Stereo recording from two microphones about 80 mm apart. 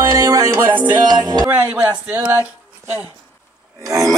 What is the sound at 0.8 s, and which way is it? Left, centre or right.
Music, right.